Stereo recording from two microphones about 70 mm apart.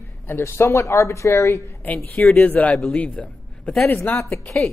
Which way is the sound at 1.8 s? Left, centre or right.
Left.